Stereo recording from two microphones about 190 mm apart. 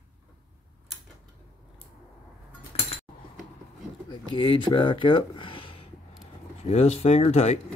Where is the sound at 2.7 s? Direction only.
30° left (ahead or behind).